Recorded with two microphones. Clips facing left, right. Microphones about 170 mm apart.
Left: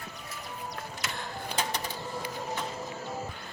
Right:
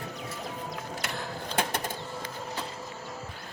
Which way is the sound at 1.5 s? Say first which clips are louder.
Right 3 dB; 55° right (ahead or behind).